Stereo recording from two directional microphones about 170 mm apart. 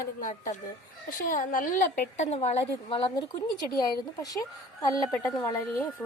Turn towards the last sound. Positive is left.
turn(degrees=15)  # may be behind; listen again after turning